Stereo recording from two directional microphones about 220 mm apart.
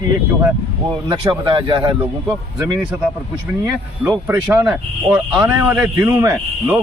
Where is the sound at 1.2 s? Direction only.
20° right (ahead or behind).